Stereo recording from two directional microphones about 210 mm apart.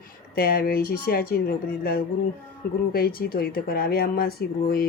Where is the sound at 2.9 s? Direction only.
45° left (ahead or behind).